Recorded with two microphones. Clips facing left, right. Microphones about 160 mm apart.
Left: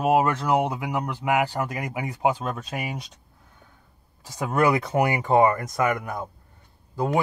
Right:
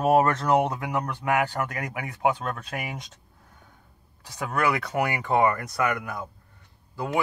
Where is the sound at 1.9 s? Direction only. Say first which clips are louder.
Left 1 dB; 30° left (ahead or behind).